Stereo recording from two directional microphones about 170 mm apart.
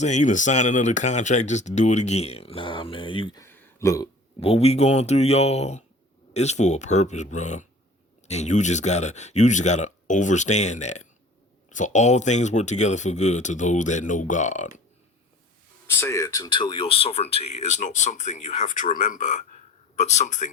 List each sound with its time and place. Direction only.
0.0 s speech: 45° left (ahead or behind); by 3.4 s 30° left (ahead or behind)
3.4 s a sound: 15° left (ahead or behind)
4.4 s speech: 35° left (ahead or behind)
15.9 s speech: 15° left (ahead or behind); by 20.5 s 45° left (ahead or behind)